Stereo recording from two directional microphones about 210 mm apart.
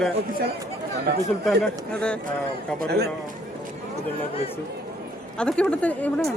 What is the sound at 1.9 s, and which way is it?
Speech, 5° left (ahead or behind).